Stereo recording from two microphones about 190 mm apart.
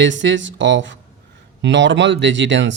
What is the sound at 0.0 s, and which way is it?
Speech, 75° right (ahead or behind).